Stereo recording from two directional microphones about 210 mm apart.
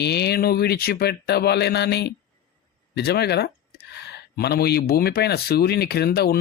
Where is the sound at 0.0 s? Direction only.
50° left (ahead or behind).